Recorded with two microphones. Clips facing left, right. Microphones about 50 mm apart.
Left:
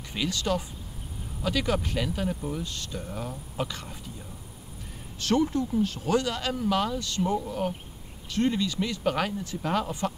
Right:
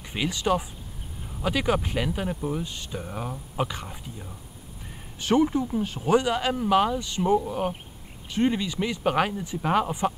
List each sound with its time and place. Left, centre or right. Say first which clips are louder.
0.1 s speech: right 3 dB; right